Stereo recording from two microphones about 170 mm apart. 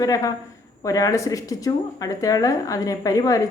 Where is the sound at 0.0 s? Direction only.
20° left (ahead or behind).